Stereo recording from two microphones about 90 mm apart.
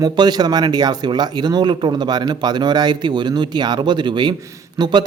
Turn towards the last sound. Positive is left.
turn(degrees=-50)  # may be behind; listen again after turning